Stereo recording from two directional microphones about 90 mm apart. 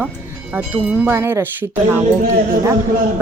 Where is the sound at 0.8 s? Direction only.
15° right (ahead or behind).